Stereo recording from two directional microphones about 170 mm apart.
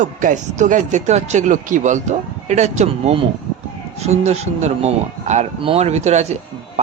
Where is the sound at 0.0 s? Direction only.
50° right (ahead or behind).